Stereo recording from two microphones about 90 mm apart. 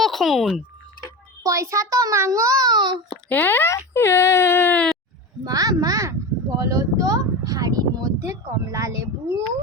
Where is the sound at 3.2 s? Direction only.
20° left (ahead or behind).